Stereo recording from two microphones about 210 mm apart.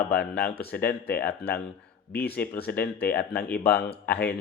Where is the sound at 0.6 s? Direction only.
10° left (ahead or behind).